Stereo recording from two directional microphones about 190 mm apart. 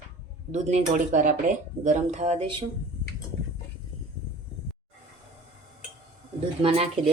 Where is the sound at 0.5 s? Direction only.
40° right (ahead or behind).